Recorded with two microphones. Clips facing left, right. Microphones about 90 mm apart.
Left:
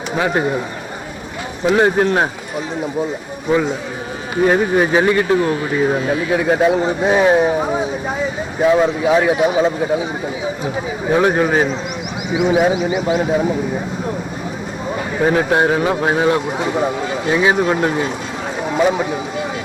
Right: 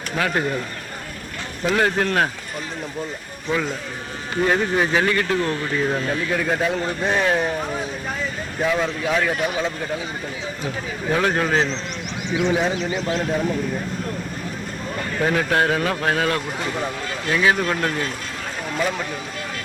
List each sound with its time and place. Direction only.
0.1 s speech: 20° left (ahead or behind)
1.7 s speech: 20° left (ahead or behind)
4.4 s speech: 15° left (ahead or behind)
11.0 s speech: 20° left (ahead or behind)
14.9 s speech: 20° left (ahead or behind)
16.5 s speech: 10° left (ahead or behind)